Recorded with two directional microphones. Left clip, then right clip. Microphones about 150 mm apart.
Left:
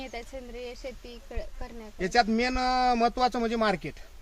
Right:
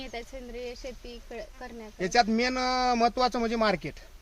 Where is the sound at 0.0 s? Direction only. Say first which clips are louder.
Even; 5° left (ahead or behind).